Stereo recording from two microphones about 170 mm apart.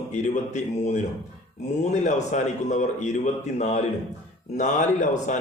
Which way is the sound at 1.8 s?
45° left (ahead or behind).